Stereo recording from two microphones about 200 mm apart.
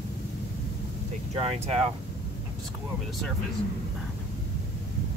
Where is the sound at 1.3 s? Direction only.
30° right (ahead or behind).